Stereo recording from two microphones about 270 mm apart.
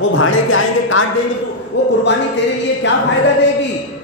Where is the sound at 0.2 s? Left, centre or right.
Left.